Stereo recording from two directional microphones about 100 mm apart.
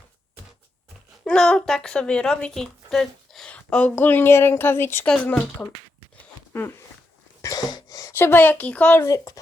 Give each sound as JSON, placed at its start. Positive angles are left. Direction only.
{"t": 1.2, "sound": "speech", "side_deg": 10}
{"t": 5.0, "sound": "speech", "side_deg": 10}
{"t": 6.5, "sound": "a sound", "side_deg": 25}
{"t": 7.4, "sound": "a sound", "side_deg": 40}
{"t": 8.1, "sound": "speech", "side_deg": 20}
{"t": 9.0, "sound": "speech", "side_deg": 35}